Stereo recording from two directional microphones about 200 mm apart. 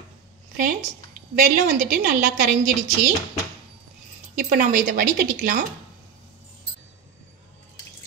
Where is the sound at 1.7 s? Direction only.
50° right (ahead or behind).